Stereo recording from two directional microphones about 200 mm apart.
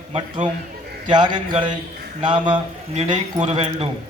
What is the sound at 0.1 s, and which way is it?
A man's voice, 30° right (ahead or behind).